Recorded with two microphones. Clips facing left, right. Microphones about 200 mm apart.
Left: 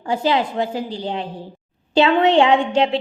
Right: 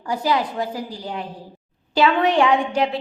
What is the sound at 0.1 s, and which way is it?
A woman's voice, 25° left (ahead or behind).